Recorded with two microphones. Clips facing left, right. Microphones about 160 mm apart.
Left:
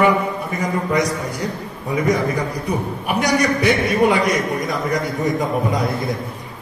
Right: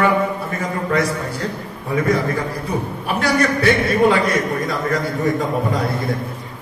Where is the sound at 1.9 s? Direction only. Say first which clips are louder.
Even; 15° left (ahead or behind).